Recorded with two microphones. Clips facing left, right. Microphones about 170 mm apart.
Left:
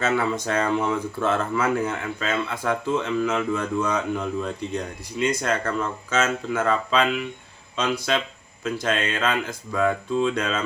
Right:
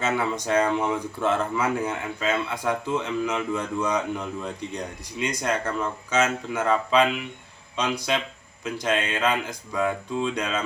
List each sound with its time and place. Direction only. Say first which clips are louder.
0.4 s speech: even; 15° right (ahead or behind)